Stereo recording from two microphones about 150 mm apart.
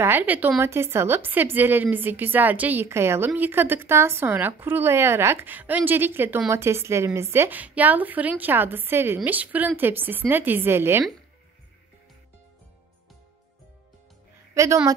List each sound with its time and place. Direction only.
0.0 s a woman's voice: 15° right (ahead or behind)
14.5 s a woman's voice: 20° right (ahead or behind)